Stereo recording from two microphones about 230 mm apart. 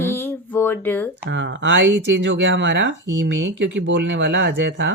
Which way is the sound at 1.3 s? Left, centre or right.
Right.